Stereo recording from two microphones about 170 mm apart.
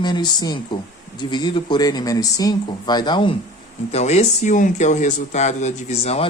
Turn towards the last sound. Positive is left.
turn(degrees=35)  # may be behind; listen again after turning